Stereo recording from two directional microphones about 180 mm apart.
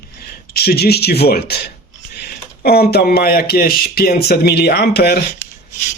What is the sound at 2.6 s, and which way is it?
Speech, 60° left (ahead or behind).